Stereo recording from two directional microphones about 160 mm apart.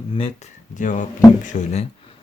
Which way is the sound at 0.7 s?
50° left (ahead or behind).